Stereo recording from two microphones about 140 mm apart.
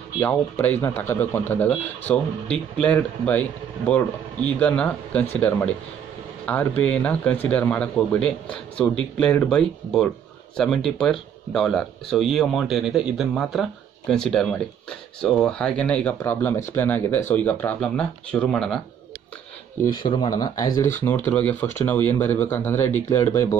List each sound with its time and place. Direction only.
0.2 s speech: 15° left (ahead or behind)
20.0 s speech: 35° left (ahead or behind)
21.0 s speech: 15° left (ahead or behind)